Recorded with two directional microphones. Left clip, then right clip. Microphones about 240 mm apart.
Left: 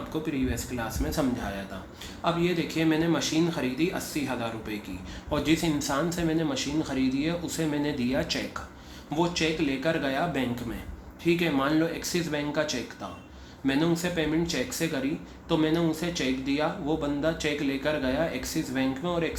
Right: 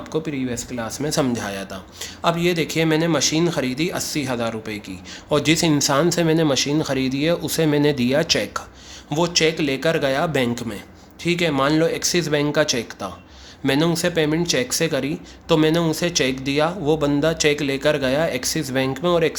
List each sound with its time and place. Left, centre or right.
0.1 s speech: right